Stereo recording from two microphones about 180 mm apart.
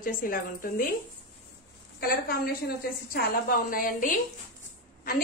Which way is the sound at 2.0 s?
55° left (ahead or behind).